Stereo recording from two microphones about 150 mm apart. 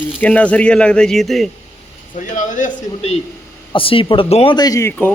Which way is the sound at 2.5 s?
55° left (ahead or behind).